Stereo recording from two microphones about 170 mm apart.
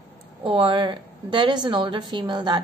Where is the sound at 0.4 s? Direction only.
30° right (ahead or behind).